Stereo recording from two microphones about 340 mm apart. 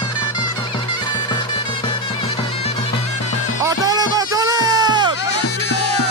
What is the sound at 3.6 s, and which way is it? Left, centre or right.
Music, centre.